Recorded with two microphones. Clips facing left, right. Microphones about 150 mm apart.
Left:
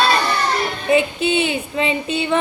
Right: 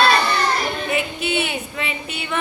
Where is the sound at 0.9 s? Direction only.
25° left (ahead or behind).